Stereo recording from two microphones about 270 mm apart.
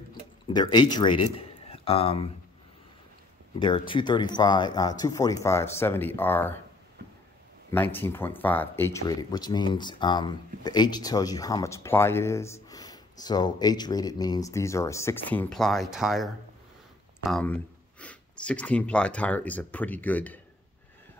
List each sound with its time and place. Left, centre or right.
0.5 s speech: centre
3.5 s speech: centre
7.7 s speech: centre